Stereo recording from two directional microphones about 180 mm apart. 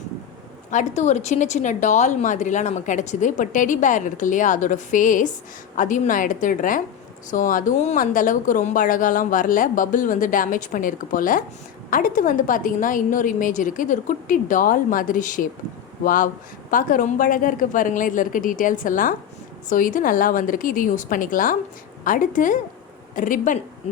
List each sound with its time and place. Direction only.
0.7 s a woman's voice: 40° left (ahead or behind)